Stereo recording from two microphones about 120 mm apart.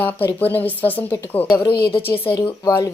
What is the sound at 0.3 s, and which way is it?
Speech, 15° left (ahead or behind).